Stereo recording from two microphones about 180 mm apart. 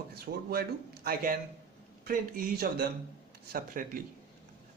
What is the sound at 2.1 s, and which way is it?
A man's voice, 55° right (ahead or behind).